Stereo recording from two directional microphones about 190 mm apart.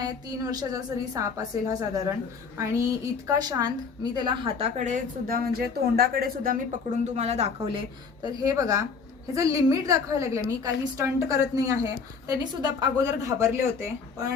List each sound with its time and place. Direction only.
0.5 s a woman's voice: 20° right (ahead or behind); by 6.6 s 50° right (ahead or behind)
7.0 s a woman's voice: 35° right (ahead or behind); by 13.9 s 15° right (ahead or behind)